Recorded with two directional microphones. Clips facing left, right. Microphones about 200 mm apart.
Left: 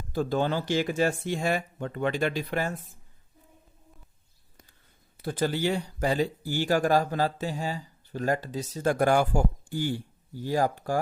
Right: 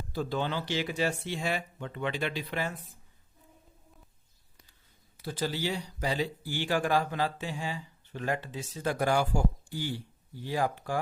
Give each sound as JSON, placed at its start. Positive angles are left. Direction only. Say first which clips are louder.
{"t": 0.1, "sound": "speech", "louder": "left 5 dB", "side_deg": 45}
{"t": 5.2, "sound": "speech", "louder": "left 5 dB", "side_deg": 55}